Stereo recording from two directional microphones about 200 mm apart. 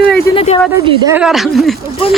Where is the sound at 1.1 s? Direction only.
Centre (ahead or behind).